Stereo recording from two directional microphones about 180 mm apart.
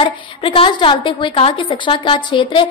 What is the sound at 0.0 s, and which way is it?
Speech, 30° left (ahead or behind).